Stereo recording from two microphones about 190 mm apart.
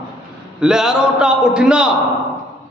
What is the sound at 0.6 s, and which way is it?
A man's voice, 5° right (ahead or behind).